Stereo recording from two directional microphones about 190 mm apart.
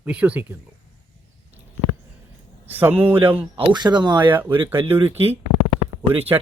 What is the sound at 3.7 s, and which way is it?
Speech, 25° right (ahead or behind).